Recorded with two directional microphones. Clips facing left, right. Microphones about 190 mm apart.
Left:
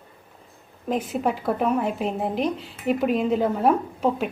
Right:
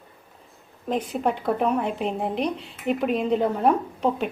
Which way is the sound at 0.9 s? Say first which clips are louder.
Even; 5° left (ahead or behind).